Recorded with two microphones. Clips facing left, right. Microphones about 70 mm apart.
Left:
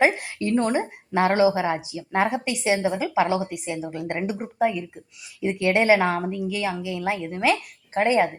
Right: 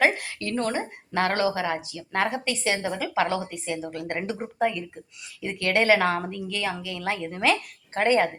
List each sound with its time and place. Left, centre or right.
0.0 s a woman's voice: centre
4.2 s speech: centre
7.3 s speech: centre